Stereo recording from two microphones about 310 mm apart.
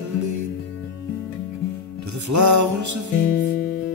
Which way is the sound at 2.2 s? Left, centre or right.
Right.